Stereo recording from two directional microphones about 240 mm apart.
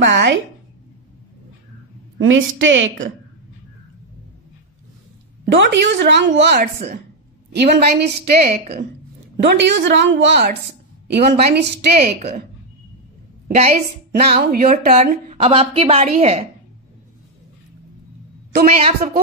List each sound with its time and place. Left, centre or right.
0.0 s a sound: right
2.1 s a woman's voice: right
5.5 s a woman's voice: right
9.4 s a woman's voice: right
13.6 s a woman's voice: right
14.4 s a woman's voice: right
18.7 s a woman's voice: right